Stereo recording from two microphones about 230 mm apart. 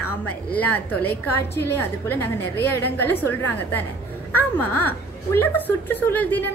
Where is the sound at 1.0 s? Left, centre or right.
Left.